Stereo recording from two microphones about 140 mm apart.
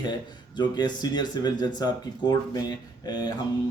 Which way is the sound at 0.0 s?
30° left (ahead or behind).